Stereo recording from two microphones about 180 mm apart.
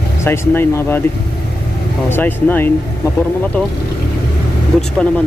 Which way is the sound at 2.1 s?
10° left (ahead or behind).